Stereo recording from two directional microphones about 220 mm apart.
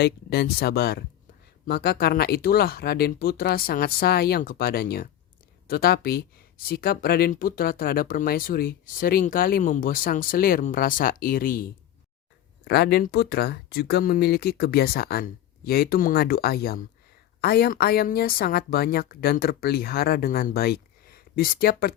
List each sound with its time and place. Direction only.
0.0 s speech: 45° left (ahead or behind)